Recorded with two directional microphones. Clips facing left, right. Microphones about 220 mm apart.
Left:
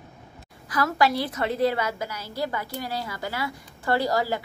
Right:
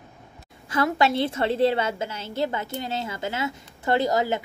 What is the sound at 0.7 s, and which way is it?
A woman's voice, 25° right (ahead or behind).